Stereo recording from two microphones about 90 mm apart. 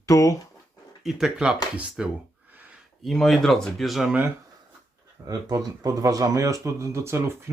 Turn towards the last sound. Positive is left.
turn(degrees=-30)  # may be behind; listen again after turning